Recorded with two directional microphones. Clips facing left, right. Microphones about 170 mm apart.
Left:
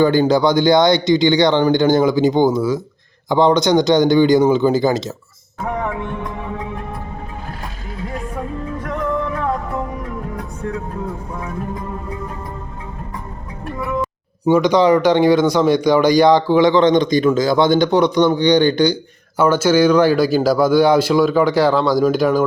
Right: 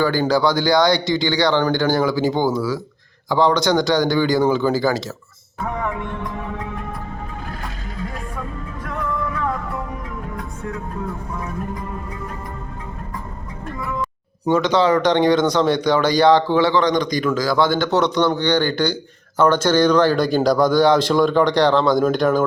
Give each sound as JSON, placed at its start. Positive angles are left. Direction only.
{"t": 0.0, "sound": "speech", "side_deg": 20}
{"t": 14.4, "sound": "speech", "side_deg": 10}